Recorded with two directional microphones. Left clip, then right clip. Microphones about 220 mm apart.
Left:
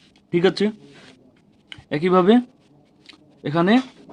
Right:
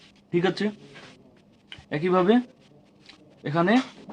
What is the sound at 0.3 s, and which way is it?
Speech, 40° left (ahead or behind).